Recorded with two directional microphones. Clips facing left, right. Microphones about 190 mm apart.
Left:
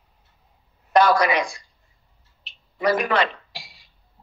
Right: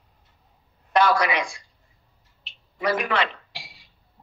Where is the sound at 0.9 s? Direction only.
40° left (ahead or behind).